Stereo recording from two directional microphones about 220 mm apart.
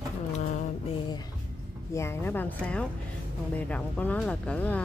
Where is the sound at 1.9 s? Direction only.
10° left (ahead or behind).